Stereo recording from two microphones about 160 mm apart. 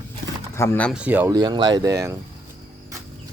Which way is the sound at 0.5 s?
15° left (ahead or behind).